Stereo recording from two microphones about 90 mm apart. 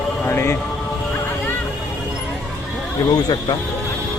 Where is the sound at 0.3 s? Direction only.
25° left (ahead or behind).